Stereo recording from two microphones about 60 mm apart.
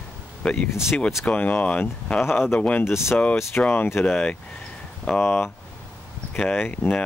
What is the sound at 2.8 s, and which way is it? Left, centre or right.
Speech, left.